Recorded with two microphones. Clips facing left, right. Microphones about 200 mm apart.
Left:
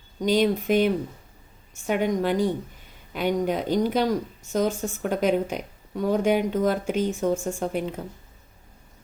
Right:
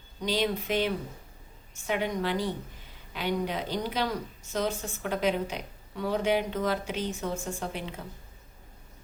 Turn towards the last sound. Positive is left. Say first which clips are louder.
# left 8 dB
turn(degrees=45)  # may be behind; listen again after turning